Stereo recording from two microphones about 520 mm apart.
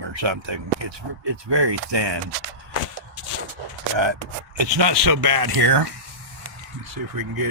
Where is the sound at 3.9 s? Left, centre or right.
Right.